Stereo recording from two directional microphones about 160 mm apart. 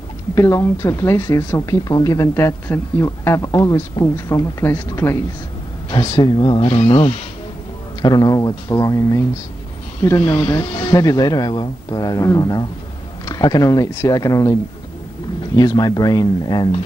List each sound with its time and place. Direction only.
0.3 s speech: 20° left (ahead or behind)
5.9 s speech: 25° left (ahead or behind)